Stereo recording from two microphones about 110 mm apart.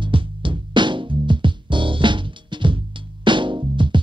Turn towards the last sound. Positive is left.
turn(degrees=-45)  # may be behind; listen again after turning